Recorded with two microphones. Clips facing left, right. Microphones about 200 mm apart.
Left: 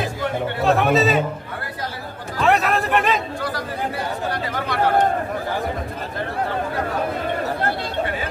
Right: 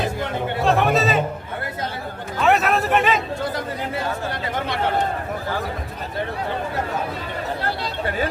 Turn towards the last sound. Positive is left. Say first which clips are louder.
# left 2 dB
turn(degrees=55)  # may be behind; listen again after turning